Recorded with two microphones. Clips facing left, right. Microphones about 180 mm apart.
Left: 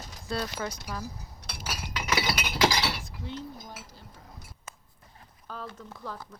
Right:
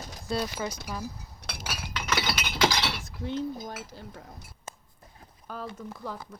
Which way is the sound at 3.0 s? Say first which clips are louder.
Right 7 dB; 60° right (ahead or behind).